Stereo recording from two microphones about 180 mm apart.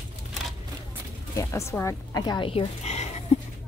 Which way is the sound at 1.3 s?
15° left (ahead or behind).